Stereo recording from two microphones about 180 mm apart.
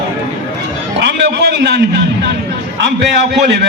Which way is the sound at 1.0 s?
70° right (ahead or behind).